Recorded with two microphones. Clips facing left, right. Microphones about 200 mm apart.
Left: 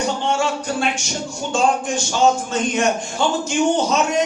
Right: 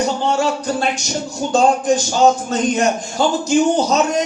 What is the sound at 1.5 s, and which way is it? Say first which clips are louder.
A man's voice: right 5 dB; 40° right (ahead or behind).